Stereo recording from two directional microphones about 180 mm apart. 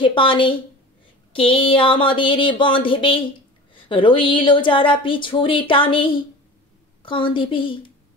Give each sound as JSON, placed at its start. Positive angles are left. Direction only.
{"t": 0.0, "sound": "speech", "side_deg": 30}